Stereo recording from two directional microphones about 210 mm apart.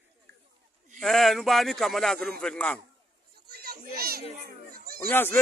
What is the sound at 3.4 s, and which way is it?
Children playing, 50° right (ahead or behind).